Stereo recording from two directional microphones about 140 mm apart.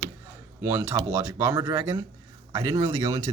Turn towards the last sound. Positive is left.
turn(degrees=-25)  # may be behind; listen again after turning